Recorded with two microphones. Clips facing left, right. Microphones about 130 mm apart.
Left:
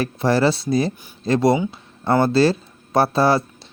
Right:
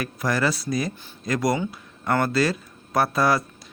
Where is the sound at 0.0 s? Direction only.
30° left (ahead or behind).